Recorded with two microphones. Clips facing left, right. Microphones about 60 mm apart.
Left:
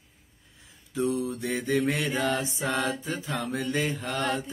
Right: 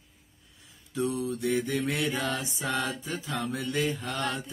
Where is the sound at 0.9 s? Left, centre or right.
Left.